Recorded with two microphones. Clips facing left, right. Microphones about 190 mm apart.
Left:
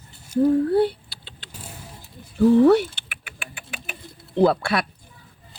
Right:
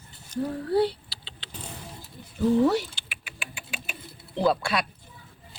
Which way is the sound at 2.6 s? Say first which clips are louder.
Left 7 dB; 60° left (ahead or behind).